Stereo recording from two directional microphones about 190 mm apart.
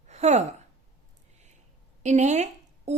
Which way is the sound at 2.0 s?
35° right (ahead or behind).